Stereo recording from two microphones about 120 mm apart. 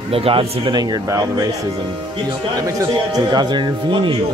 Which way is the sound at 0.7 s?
30° right (ahead or behind).